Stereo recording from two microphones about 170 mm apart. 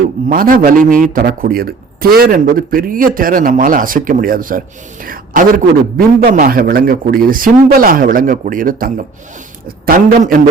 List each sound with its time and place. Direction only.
0.0 s a man's voice: 55° right (ahead or behind)